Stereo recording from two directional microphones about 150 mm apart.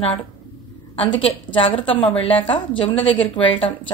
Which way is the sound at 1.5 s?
35° left (ahead or behind).